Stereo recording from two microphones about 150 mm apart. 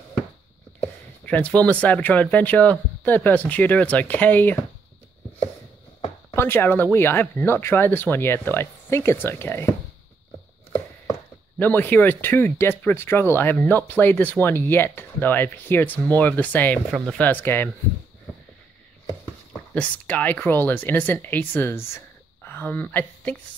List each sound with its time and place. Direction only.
1.2 s speech: 10° left (ahead or behind)
6.3 s speech: 15° left (ahead or behind)
11.5 s speech: 10° left (ahead or behind)
16.9 s speech: centre (ahead or behind)
17.2 s speech: 15° left (ahead or behind)
19.7 s speech: 10° left (ahead or behind)